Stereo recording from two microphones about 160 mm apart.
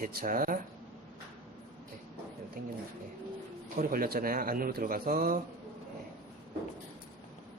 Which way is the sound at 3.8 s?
65° right (ahead or behind).